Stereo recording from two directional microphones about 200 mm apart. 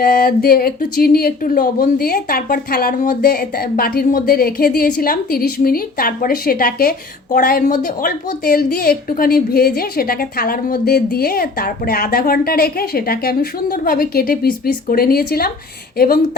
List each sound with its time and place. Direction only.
0.0 s speech: 45° left (ahead or behind)